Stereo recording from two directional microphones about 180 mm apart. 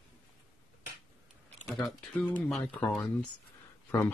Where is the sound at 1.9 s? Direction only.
10° left (ahead or behind).